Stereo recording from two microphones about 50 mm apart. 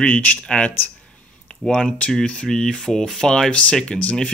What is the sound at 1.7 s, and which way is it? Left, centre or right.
Speech, left.